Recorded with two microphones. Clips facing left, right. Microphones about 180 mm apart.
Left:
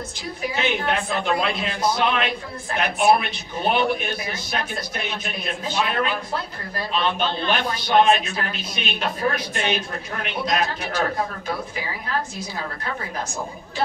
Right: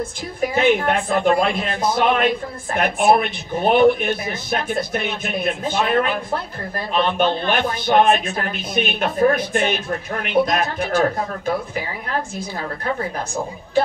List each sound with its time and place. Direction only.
0.6 s a man's voice: 50° right (ahead or behind)